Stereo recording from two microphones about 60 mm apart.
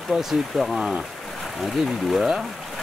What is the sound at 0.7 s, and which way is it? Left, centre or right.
Speech, centre.